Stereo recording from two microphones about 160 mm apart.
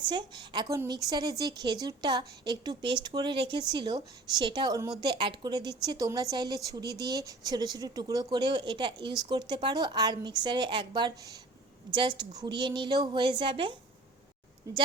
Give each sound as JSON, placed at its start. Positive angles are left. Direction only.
{"t": 0.1, "sound": "a woman's voice", "side_deg": -30}